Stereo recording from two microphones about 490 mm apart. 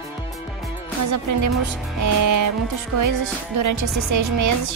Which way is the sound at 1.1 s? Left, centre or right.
Right.